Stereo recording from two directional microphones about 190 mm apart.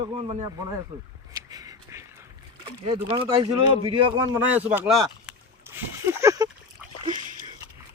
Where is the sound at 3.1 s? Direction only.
25° right (ahead or behind).